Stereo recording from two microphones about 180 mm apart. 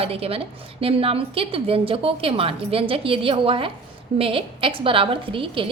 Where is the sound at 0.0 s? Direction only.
35° right (ahead or behind).